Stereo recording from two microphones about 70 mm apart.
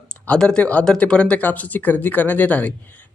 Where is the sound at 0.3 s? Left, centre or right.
Centre.